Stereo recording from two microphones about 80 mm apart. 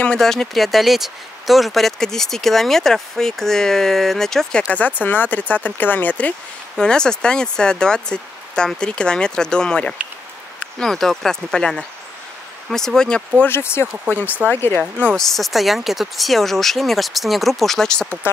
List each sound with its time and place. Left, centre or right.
0.0 s speech: centre
5.0 s speech: left
13.4 s speech: left
15.1 s speech: centre